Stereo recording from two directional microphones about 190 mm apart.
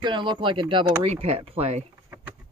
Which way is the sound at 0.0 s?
25° right (ahead or behind).